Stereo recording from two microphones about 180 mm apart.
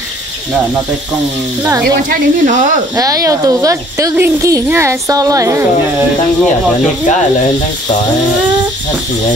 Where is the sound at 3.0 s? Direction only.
20° right (ahead or behind).